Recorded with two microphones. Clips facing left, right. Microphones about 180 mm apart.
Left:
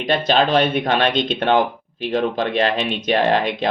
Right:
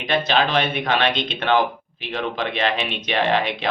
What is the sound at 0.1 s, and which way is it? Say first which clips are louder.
Speech: left 3 dB; 45° left (ahead or behind).